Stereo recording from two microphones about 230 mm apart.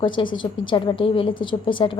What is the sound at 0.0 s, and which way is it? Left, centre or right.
A woman's voice, left.